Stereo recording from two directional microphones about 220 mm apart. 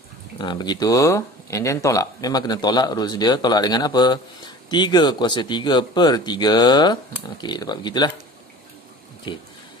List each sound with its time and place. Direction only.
0.4 s speech: 20° left (ahead or behind)
9.3 s speech: 20° left (ahead or behind)